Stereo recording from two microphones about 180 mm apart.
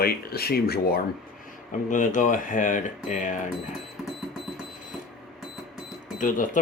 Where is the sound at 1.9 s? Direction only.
45° left (ahead or behind).